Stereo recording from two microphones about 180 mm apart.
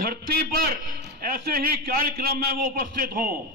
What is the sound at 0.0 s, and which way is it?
A man's voice, 55° right (ahead or behind).